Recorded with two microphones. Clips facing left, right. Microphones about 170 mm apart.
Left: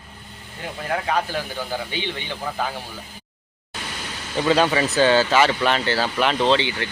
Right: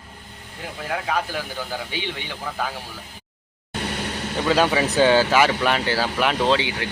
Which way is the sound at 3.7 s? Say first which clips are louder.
Right 6 dB; 60° right (ahead or behind).